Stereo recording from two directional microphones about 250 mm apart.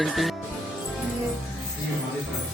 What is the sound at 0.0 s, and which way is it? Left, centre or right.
Speech, centre.